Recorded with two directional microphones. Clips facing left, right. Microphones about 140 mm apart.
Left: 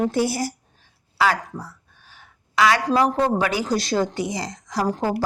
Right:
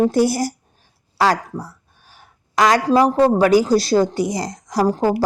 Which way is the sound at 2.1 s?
40° right (ahead or behind).